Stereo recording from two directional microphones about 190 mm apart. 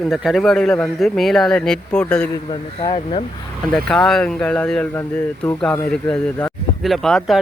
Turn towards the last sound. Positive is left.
turn(degrees=0)  # may be behind; listen again after turning